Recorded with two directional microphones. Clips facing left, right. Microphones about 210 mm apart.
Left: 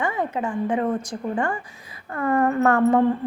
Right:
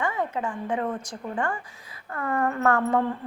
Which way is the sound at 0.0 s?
15° left (ahead or behind).